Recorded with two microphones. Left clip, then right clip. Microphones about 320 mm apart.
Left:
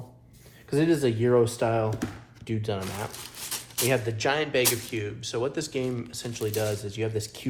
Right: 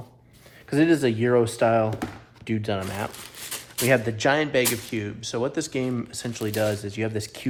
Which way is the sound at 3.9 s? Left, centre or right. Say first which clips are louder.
Right 6 dB; right.